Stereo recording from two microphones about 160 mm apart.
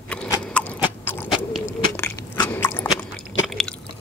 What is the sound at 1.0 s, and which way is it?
Owl, 15° left (ahead or behind).